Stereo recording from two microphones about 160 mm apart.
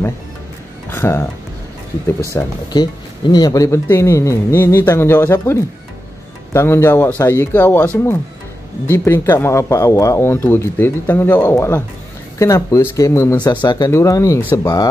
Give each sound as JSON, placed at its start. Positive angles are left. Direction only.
{"t": 0.8, "sound": "speech", "side_deg": 15}
{"t": 2.3, "sound": "speech", "side_deg": 25}